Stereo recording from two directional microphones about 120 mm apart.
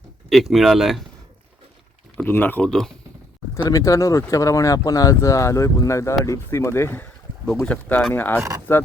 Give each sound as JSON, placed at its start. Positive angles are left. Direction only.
{"t": 0.3, "sound": "speech", "side_deg": 0}
{"t": 2.1, "sound": "speech", "side_deg": 15}
{"t": 2.6, "sound": "speech", "side_deg": 5}
{"t": 3.7, "sound": "speech", "side_deg": 30}
{"t": 7.4, "sound": "speech", "side_deg": 5}